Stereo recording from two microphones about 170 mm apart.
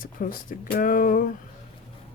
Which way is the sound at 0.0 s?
55° left (ahead or behind).